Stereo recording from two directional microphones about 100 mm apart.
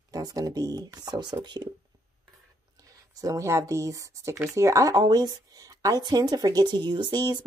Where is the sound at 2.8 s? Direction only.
35° right (ahead or behind).